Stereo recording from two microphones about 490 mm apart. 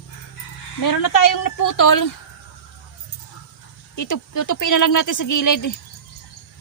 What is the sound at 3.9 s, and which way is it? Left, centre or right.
A woman's voice, left.